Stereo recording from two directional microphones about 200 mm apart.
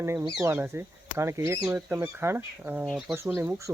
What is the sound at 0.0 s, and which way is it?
Speech, 15° right (ahead or behind).